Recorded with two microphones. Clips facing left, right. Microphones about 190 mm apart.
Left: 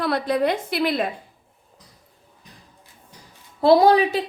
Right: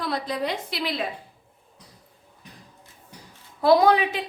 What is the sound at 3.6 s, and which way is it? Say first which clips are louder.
Speech: left 3 dB; 30° left (ahead or behind).